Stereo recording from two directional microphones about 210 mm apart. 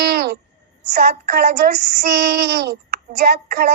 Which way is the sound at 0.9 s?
45° right (ahead or behind).